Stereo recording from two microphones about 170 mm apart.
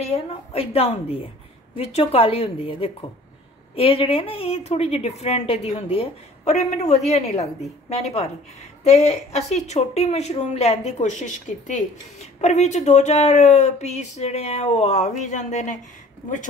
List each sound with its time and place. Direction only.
0.1 s speech: 35° left (ahead or behind)